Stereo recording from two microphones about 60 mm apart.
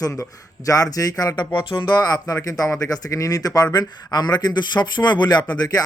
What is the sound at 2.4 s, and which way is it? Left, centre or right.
Speech, left.